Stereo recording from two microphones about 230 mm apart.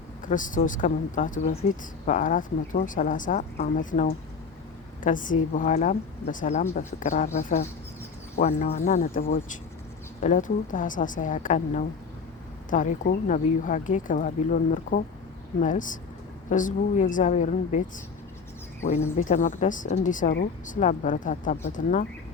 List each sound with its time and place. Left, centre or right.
0.3 s speech: left
8.4 s speech: left